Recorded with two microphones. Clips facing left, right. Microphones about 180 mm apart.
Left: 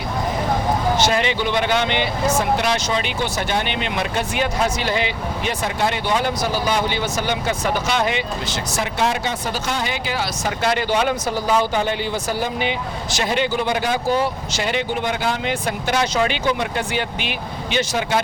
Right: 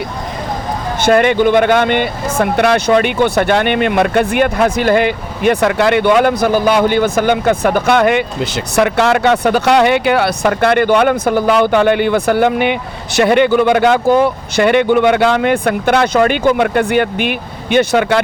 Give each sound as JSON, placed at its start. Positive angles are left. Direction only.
{"t": 1.0, "sound": "speech", "side_deg": -55}